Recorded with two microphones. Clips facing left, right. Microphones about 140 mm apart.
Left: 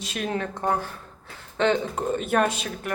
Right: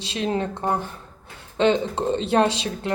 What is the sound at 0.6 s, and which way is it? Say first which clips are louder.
A woman's voice: right 1 dB; 15° right (ahead or behind).